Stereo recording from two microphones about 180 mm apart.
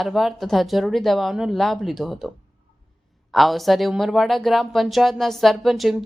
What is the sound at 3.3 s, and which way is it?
Speech, centre (ahead or behind).